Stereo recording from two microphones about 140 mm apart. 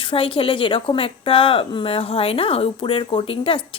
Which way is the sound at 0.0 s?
40° left (ahead or behind).